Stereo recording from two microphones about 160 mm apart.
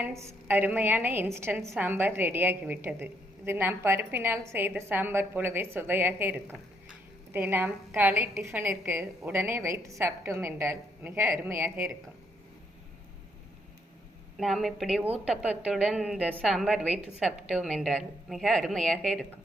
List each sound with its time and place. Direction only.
0.0 s a woman's voice: 20° right (ahead or behind)
14.3 s a woman's voice: centre (ahead or behind)